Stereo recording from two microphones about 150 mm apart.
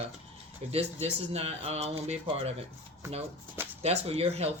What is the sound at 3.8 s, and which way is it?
Speech, 45° right (ahead or behind).